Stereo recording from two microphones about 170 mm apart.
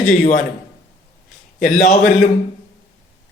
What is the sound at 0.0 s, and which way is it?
Speech, 50° left (ahead or behind).